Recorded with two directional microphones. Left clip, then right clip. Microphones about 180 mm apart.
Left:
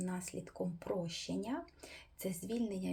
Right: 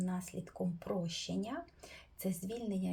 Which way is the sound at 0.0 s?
15° left (ahead or behind).